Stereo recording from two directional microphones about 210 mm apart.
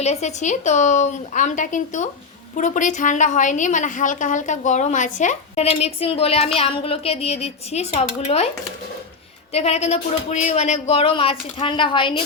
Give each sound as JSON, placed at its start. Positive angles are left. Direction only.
{"t": 0.0, "sound": "a woman's voice", "side_deg": 30}
{"t": 9.5, "sound": "speech", "side_deg": 30}